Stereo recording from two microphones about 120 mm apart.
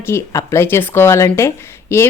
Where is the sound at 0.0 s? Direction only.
20° left (ahead or behind).